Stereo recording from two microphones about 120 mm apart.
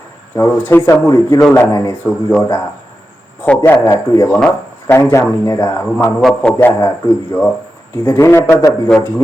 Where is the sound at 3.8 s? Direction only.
30° left (ahead or behind).